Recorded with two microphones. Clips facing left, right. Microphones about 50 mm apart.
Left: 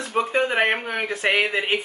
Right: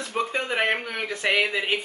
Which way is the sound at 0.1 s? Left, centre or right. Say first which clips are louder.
Left 5 dB; centre.